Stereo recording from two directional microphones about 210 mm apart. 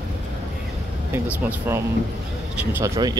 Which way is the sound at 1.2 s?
10° right (ahead or behind).